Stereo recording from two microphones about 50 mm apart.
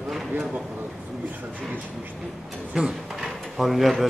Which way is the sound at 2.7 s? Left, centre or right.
Centre.